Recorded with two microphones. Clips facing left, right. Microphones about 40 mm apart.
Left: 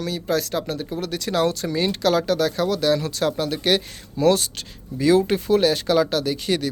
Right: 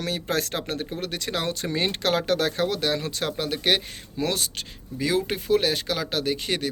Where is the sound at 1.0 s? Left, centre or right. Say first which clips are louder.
Left 11 dB; right.